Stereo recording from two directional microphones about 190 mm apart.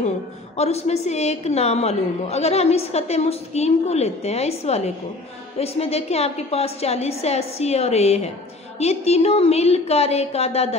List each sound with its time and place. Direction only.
0.6 s a woman's voice: 35° left (ahead or behind)